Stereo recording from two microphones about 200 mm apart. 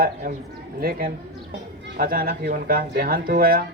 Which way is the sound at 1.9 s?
45° right (ahead or behind).